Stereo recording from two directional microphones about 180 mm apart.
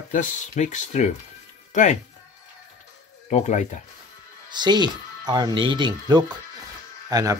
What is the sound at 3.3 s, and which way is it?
Speech, 40° left (ahead or behind).